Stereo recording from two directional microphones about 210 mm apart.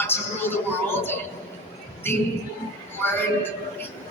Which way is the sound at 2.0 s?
10° left (ahead or behind).